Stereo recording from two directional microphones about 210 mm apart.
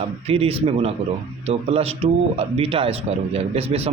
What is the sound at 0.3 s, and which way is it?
Speech, 30° right (ahead or behind).